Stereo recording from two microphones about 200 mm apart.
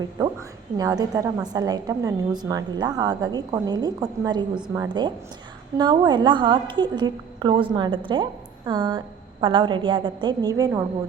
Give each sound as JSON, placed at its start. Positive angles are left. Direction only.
{"t": 0.8, "sound": "a woman's voice", "side_deg": -20}